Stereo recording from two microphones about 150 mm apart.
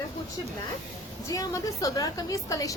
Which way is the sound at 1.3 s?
25° left (ahead or behind).